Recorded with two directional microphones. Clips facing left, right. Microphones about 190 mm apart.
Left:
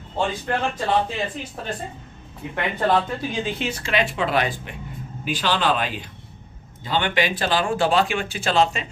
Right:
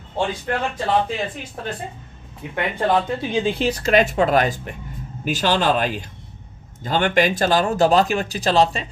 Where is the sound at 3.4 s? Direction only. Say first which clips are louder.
Right 7 dB; 35° right (ahead or behind).